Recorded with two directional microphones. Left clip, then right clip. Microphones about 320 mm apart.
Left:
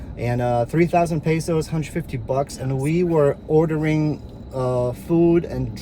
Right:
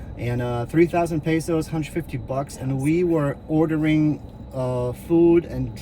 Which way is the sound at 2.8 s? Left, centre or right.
Centre.